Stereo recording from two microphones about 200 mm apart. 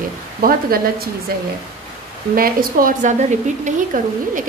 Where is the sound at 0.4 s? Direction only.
45° right (ahead or behind).